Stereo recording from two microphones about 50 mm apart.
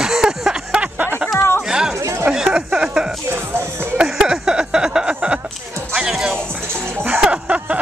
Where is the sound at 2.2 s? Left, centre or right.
Centre.